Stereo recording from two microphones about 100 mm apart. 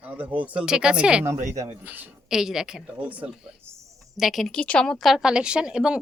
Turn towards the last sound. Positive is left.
turn(degrees=-10)  # may be behind; listen again after turning